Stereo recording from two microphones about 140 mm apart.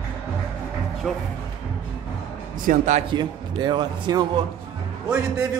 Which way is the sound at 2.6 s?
60° right (ahead or behind).